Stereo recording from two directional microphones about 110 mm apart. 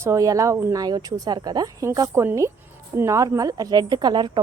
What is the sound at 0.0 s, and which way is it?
A woman's voice, 30° right (ahead or behind).